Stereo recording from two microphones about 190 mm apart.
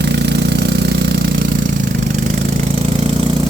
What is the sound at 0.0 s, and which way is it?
Engine, 65° right (ahead or behind).